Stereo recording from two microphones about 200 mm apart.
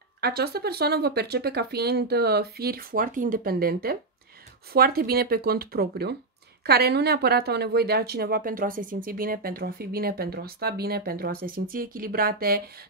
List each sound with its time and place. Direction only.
0.2 s speech: 50° right (ahead or behind)